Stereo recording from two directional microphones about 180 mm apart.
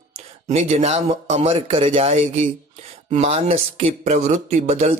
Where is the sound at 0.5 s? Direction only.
40° right (ahead or behind).